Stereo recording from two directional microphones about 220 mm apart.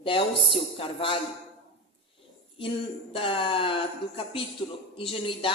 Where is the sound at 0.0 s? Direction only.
25° left (ahead or behind).